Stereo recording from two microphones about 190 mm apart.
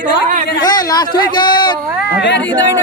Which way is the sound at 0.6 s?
20° left (ahead or behind).